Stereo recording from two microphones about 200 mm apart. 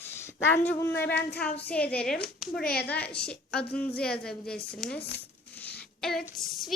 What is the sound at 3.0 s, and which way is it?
Speech, 5° left (ahead or behind).